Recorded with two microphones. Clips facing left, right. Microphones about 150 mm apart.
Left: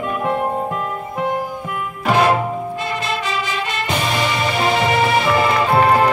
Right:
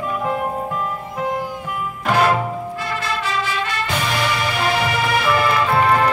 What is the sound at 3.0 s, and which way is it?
Music, 20° left (ahead or behind).